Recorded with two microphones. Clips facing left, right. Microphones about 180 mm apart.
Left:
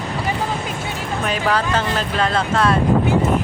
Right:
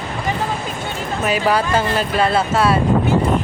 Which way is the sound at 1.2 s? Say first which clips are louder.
Right 3 dB; 10° right (ahead or behind).